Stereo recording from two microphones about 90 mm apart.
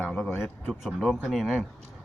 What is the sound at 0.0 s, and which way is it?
Speech, 10° left (ahead or behind).